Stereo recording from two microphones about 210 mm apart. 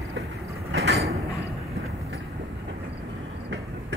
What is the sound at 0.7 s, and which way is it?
Train, 50° right (ahead or behind).